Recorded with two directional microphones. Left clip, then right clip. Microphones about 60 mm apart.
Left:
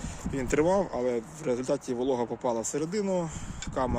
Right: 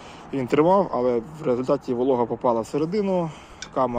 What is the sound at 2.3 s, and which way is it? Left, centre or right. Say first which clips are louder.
Speech: right 8 dB; centre.